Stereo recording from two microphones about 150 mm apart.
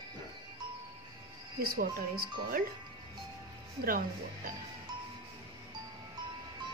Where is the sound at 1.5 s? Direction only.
85° right.